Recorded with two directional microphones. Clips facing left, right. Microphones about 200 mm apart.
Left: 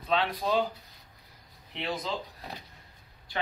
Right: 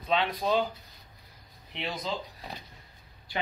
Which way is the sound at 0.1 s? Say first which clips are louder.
Right 1 dB; centre (ahead or behind).